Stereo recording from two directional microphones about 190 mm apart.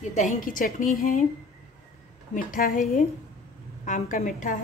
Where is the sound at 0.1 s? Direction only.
40° left (ahead or behind).